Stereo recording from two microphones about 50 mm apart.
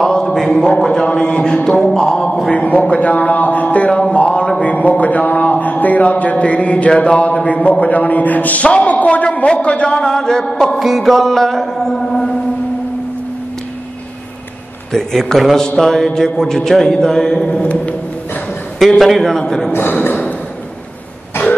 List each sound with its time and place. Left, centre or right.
0.0 s a man's voice: centre
2.5 s a man's voice: left
4.1 s a sound: left
4.6 s a man's voice: left
9.9 s a man's voice: centre
10.8 s a man's voice: centre
14.9 s a man's voice: centre
17.6 s a man's voice: left
18.9 s a man's voice: centre
19.3 s a man's voice: centre
19.7 s a man's voice: left